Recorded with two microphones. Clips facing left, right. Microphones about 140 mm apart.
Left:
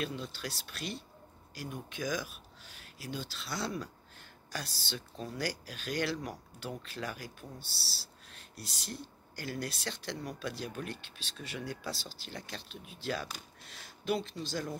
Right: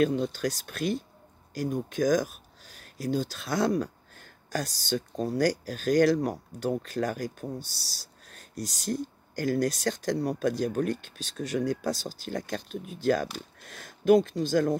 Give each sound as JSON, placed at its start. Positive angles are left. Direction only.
{"t": 0.0, "sound": "speech", "side_deg": -45}